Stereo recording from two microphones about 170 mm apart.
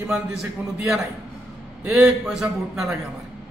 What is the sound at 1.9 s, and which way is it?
A man's voice, 5° right (ahead or behind).